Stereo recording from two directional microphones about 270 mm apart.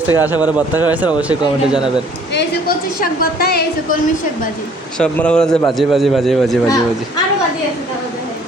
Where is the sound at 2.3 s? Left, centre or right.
Left.